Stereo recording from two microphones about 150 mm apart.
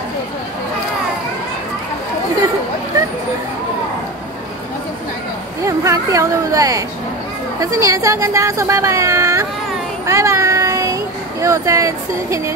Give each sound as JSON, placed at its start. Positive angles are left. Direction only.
{"t": 5.7, "sound": "speech", "side_deg": -20}
{"t": 10.0, "sound": "a sound", "side_deg": -20}
{"t": 11.4, "sound": "speech", "side_deg": -20}